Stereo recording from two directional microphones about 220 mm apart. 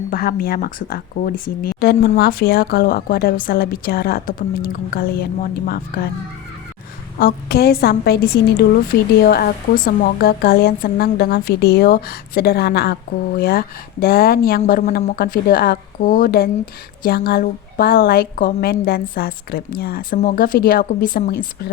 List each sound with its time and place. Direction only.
0.1 s speech: 40° left (ahead or behind)
7.2 s speech: 40° left (ahead or behind)